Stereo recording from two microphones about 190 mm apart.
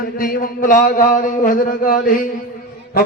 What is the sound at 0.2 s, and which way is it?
Mantra, 45° left (ahead or behind).